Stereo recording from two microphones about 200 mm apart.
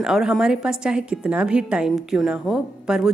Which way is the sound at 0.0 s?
Centre (ahead or behind).